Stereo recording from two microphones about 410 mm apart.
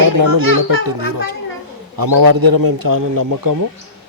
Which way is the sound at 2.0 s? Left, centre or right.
Right.